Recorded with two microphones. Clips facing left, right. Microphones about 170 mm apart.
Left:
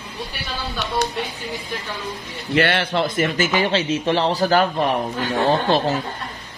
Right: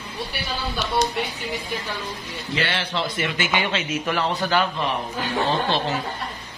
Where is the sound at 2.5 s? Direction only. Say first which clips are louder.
Left 7 dB; 55° left (ahead or behind).